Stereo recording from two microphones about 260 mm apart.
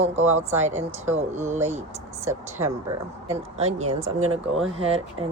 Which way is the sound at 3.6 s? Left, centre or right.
Right.